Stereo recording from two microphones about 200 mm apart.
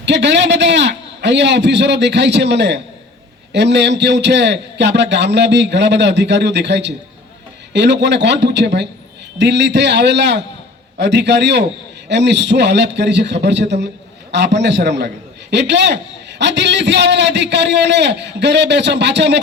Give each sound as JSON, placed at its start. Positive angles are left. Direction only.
{"t": 0.0, "sound": "a man's voice", "side_deg": -60}